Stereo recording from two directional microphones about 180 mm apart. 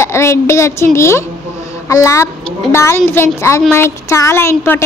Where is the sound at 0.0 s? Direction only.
15° left (ahead or behind).